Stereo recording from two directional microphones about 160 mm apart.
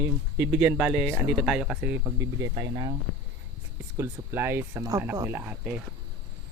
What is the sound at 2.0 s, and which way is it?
Speech, 25° right (ahead or behind).